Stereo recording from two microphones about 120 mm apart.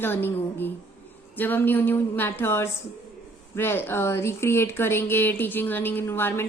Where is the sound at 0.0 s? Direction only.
15° left (ahead or behind).